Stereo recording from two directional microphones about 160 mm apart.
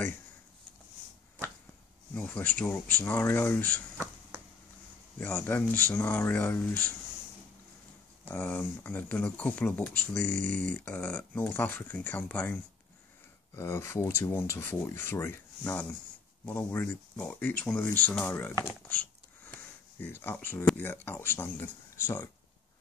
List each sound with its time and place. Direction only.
2.1 s speech: 10° left (ahead or behind)
5.2 s speech: 10° left (ahead or behind)
8.3 s speech: 10° left (ahead or behind)
10.1 s speech: 50° right (ahead or behind)
10.7 s speech: 10° left (ahead or behind)
13.6 s speech: 15° left (ahead or behind)
19.5 s a sound: 15° left (ahead or behind)
20.3 s speech: 10° left (ahead or behind)